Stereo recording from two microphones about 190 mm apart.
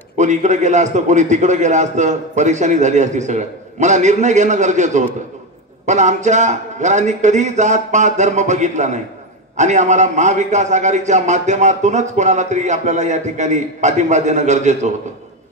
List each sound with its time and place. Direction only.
0.2 s a man's voice: 40° right (ahead or behind)